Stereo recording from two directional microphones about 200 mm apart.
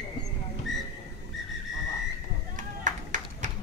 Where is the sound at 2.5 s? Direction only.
40° right (ahead or behind).